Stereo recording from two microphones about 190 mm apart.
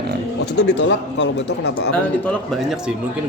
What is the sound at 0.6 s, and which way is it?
Speech, 75° left (ahead or behind).